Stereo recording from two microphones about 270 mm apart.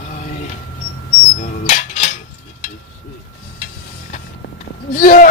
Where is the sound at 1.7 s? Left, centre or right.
Left.